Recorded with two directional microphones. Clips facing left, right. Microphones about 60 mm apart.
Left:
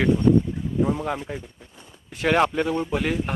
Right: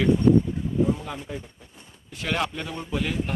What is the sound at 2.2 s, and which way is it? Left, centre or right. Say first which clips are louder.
Speech: left 8 dB; left.